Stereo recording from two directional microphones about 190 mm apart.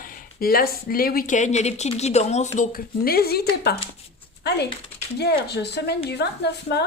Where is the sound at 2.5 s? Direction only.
50° left (ahead or behind).